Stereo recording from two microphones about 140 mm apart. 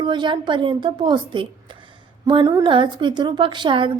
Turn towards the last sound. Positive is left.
turn(degrees=-35)  # may be behind; listen again after turning